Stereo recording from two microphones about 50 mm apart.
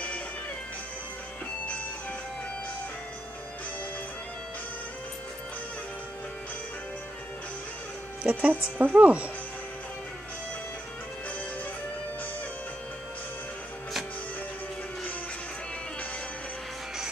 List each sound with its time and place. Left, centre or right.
8.2 s speech: right